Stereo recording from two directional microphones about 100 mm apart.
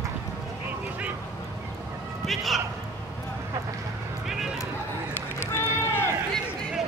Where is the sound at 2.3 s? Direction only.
Centre (ahead or behind).